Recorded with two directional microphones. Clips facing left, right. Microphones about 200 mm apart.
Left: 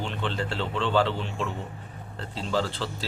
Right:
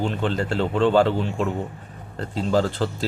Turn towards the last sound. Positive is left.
turn(degrees=-45)  # may be behind; listen again after turning